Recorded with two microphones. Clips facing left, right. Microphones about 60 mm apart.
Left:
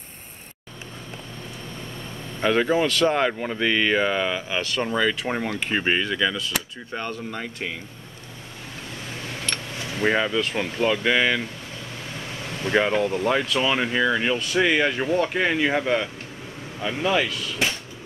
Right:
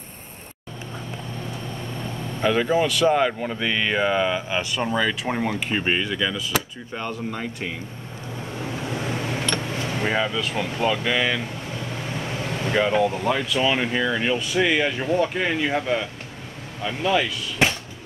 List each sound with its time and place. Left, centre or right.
2.4 s speech: centre
5.7 s speech: centre
8.9 s a sound: right
9.3 s a sound: right
10.0 s speech: centre
12.2 s vehicle: right
12.9 s speech: centre